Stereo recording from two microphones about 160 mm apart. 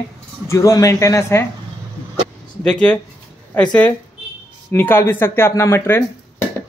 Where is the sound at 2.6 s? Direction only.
5° left (ahead or behind).